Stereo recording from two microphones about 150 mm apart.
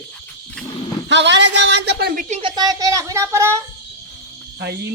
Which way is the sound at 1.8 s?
90° right.